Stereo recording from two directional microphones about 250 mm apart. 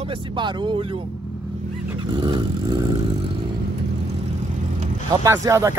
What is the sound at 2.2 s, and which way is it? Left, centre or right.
Speech, centre.